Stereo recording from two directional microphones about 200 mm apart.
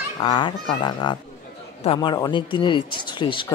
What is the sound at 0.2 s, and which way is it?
Speech, 25° left (ahead or behind).